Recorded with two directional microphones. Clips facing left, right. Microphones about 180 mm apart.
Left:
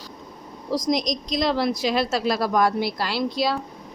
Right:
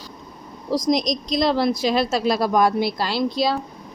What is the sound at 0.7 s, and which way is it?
A woman's voice, 35° right (ahead or behind).